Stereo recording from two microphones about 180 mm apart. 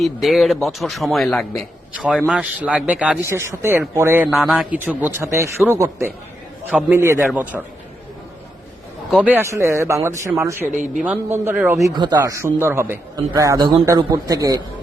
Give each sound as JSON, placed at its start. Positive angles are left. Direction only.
{"t": 0.0, "sound": "a man's voice", "side_deg": 0}
{"t": 4.3, "sound": "a man's voice", "side_deg": 0}
{"t": 9.0, "sound": "a man's voice", "side_deg": -5}
{"t": 11.8, "sound": "a man's voice", "side_deg": -25}